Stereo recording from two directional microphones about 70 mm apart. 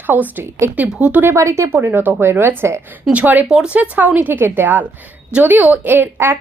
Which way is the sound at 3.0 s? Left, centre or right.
Right.